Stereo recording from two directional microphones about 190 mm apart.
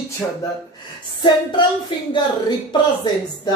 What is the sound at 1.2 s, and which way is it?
Speech, 25° left (ahead or behind).